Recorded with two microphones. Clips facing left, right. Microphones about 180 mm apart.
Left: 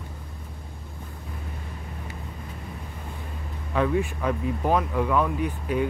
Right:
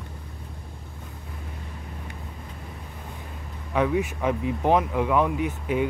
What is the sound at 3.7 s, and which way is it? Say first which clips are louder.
Speech: right 1 dB; 15° right (ahead or behind).